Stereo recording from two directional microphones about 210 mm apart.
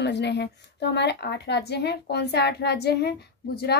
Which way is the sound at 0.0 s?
55° left (ahead or behind).